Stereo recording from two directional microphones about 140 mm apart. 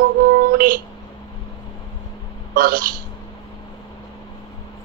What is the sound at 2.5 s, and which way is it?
Speech, 90° right.